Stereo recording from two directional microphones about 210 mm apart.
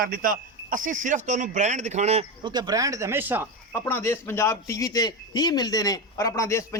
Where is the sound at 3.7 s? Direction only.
10° left (ahead or behind).